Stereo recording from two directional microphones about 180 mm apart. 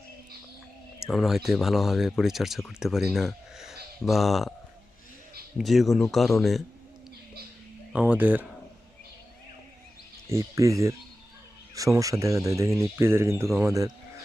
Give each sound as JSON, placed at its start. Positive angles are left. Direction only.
{"t": 1.1, "sound": "speech", "side_deg": 0}
{"t": 5.5, "sound": "speech", "side_deg": 0}
{"t": 7.9, "sound": "speech", "side_deg": -10}
{"t": 10.2, "sound": "speech", "side_deg": -15}